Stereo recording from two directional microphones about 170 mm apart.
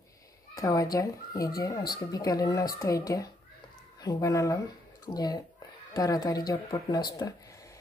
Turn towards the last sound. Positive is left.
turn(degrees=20)  # may be behind; listen again after turning